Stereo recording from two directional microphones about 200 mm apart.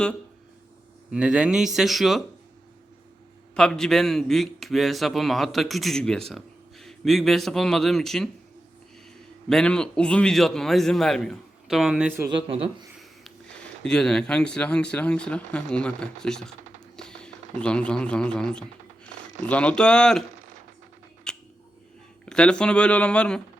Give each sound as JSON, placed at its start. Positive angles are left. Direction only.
{"t": 1.1, "sound": "a man's voice", "side_deg": -5}
{"t": 3.5, "sound": "a man's voice", "side_deg": 5}
{"t": 9.5, "sound": "a man's voice", "side_deg": 5}
{"t": 12.3, "sound": "speech", "side_deg": -25}
{"t": 13.8, "sound": "a man's voice", "side_deg": 5}
{"t": 21.3, "sound": "a sound", "side_deg": 5}
{"t": 22.3, "sound": "a man's voice", "side_deg": 5}